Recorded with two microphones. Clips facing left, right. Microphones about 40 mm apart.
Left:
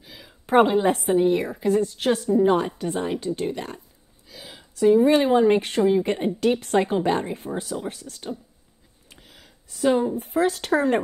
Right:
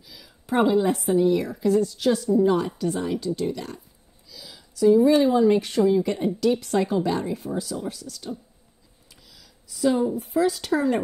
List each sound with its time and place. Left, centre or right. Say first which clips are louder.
0.0 s a woman's voice: left 3 dB; left